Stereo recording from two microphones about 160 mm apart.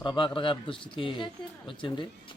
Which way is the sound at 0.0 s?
30° left (ahead or behind).